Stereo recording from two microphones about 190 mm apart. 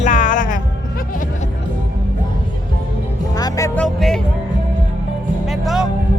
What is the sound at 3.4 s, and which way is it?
Speech, 15° left (ahead or behind).